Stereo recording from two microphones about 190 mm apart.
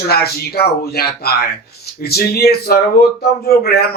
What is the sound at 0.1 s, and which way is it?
A man's voice, 55° left (ahead or behind).